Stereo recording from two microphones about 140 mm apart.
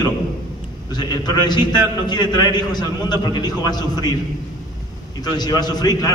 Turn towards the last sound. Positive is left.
turn(degrees=30)  # may be behind; listen again after turning